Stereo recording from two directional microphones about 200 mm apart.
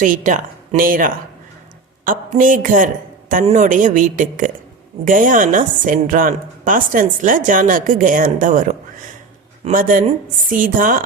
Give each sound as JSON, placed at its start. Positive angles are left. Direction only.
{"t": 0.0, "sound": "a woman's voice", "side_deg": -40}